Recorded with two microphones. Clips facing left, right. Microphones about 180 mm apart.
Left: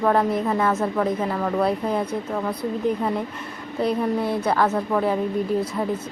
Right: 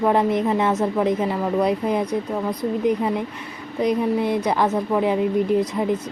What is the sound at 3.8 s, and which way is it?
A woman's voice, 15° right (ahead or behind).